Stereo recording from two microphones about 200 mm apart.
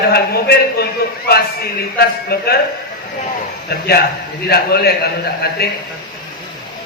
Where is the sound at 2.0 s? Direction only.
50° left (ahead or behind).